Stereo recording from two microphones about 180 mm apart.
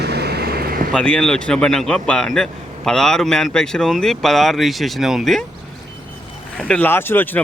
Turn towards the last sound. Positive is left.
turn(degrees=10)  # may be behind; listen again after turning